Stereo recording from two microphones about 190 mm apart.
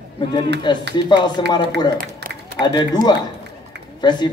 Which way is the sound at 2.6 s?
25° left (ahead or behind).